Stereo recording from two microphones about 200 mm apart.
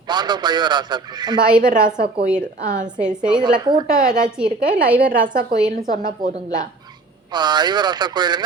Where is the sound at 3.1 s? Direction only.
5° right (ahead or behind).